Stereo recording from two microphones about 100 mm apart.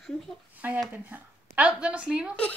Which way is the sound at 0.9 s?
15° right (ahead or behind).